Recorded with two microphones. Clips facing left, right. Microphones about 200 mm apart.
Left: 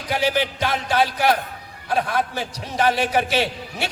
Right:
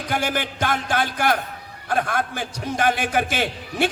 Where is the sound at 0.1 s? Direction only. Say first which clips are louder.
Left 4 dB; 50° right (ahead or behind).